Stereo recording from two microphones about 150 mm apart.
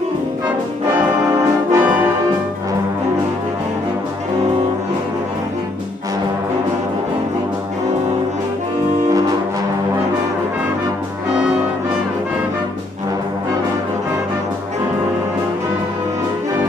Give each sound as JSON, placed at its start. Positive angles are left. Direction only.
{"t": 1.2, "sound": "brass instrument", "side_deg": -25}